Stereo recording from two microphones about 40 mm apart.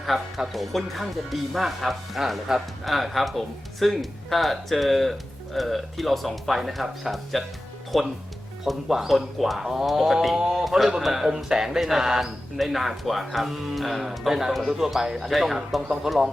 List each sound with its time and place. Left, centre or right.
0.0 s speech: centre
10.3 s speech: centre
12.5 s speech: centre